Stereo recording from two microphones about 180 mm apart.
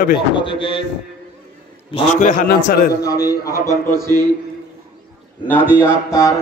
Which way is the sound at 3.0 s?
20° left (ahead or behind).